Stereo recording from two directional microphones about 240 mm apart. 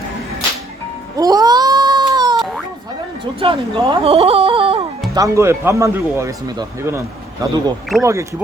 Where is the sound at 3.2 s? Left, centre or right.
Right.